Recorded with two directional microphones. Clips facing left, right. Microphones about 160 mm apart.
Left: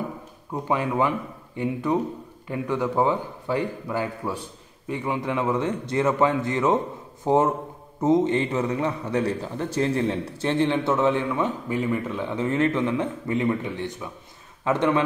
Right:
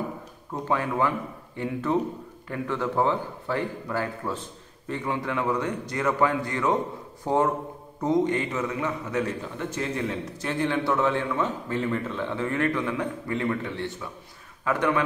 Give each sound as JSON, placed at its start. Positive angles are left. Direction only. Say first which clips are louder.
{"t": 0.5, "sound": "a man's voice", "louder": "left 2 dB", "side_deg": 15}